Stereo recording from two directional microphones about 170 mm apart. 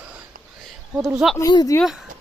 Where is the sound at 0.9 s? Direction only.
5° right (ahead or behind).